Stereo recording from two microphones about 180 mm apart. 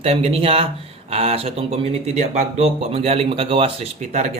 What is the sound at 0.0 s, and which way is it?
Speech, 35° right (ahead or behind).